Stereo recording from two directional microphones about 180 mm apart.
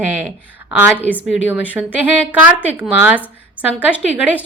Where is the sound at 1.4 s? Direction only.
90° left.